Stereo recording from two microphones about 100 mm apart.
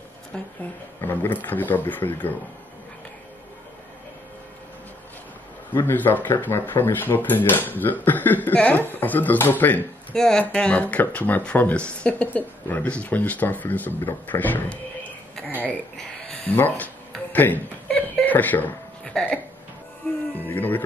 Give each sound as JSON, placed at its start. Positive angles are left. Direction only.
{"t": 1.0, "sound": "speech", "side_deg": 20}
{"t": 5.7, "sound": "speech", "side_deg": 20}
{"t": 10.1, "sound": "speech", "side_deg": 5}
{"t": 16.4, "sound": "a sound", "side_deg": 20}
{"t": 20.4, "sound": "speech", "side_deg": 20}